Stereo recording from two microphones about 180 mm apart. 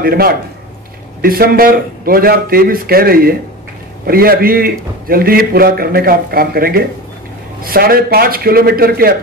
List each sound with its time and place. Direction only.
0.0 s a man's voice: 55° right (ahead or behind)